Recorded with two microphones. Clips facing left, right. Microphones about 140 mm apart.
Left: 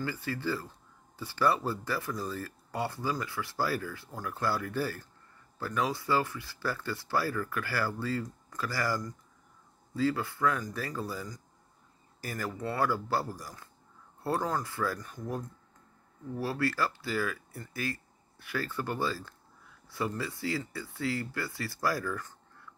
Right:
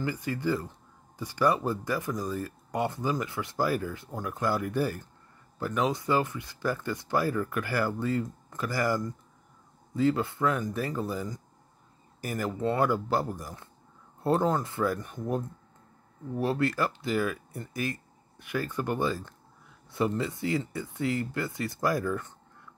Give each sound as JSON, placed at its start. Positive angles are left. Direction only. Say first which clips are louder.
{"t": 0.0, "sound": "speech", "louder": "right 4 dB", "side_deg": -15}